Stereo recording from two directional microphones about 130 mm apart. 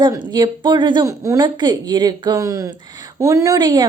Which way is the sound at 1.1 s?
25° right (ahead or behind).